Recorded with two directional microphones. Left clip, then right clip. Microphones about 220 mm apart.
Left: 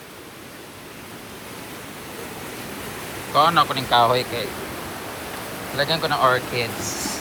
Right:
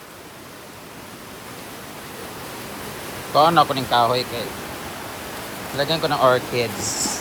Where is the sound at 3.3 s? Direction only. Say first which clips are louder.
Right 2 dB; 25° right (ahead or behind).